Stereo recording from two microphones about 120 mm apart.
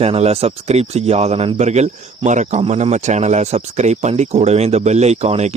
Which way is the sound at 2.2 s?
85° right.